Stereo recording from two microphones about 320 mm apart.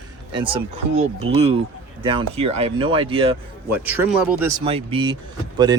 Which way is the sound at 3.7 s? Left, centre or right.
Centre.